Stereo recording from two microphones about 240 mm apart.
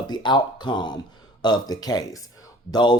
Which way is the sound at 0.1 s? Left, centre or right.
Centre.